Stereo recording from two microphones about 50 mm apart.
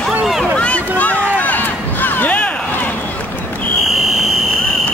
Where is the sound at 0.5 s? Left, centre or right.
Left.